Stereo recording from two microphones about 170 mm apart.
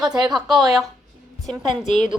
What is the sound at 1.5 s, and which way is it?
Speech, 25° right (ahead or behind).